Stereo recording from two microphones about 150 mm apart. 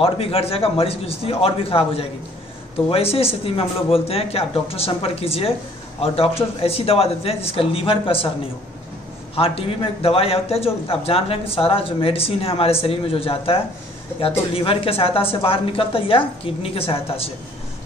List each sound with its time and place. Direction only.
0.0 s a man's voice: 40° left (ahead or behind)
9.3 s a man's voice: 40° left (ahead or behind)